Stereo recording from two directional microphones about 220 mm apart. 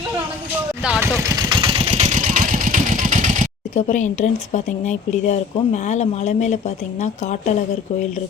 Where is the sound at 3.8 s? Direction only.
35° left (ahead or behind).